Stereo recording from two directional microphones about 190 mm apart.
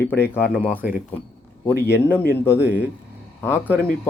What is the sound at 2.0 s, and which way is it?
Speech, 10° left (ahead or behind).